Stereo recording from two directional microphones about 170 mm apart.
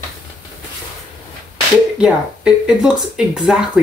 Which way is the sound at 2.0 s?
5° right (ahead or behind).